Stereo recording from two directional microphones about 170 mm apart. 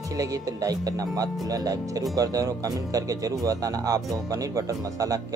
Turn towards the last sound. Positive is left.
turn(degrees=-20)  # may be behind; listen again after turning